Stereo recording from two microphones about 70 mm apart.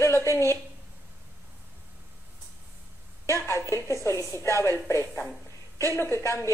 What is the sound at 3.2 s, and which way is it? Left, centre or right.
A woman's voice, left.